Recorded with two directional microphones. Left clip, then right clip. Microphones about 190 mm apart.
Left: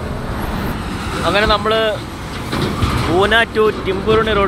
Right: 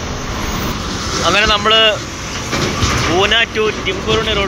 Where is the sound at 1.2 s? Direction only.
5° left (ahead or behind).